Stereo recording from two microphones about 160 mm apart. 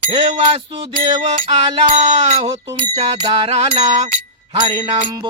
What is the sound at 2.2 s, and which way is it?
Music, 40° right (ahead or behind).